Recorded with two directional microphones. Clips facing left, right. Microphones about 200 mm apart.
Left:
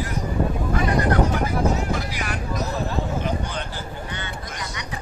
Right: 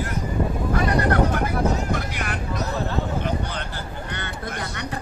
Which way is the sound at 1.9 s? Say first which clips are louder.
Even; 60° right (ahead or behind).